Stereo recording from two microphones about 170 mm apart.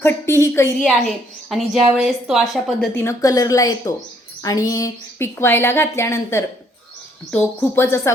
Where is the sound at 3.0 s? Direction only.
20° left (ahead or behind).